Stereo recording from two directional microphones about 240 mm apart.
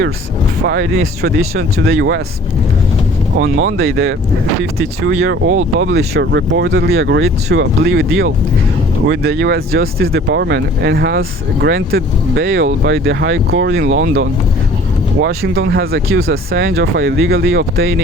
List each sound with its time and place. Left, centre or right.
0.6 s speech: right
1.4 s speech: right
3.3 s speech: right
9.0 s speech: right
15.2 s speech: right